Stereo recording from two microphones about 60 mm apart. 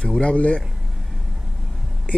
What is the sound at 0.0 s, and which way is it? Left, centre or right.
Speech, centre.